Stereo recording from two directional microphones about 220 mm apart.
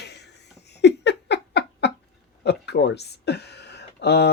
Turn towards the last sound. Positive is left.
turn(degrees=50)  # may be behind; listen again after turning